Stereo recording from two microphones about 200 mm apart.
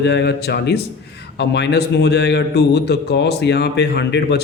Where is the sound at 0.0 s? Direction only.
55° left (ahead or behind).